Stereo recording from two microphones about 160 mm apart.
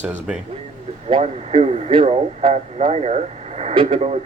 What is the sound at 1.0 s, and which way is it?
Speech, 40° right (ahead or behind).